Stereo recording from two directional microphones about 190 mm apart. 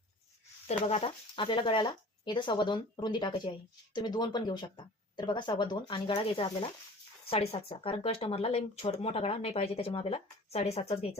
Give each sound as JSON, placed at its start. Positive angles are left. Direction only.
{"t": 0.7, "sound": "speech", "side_deg": 35}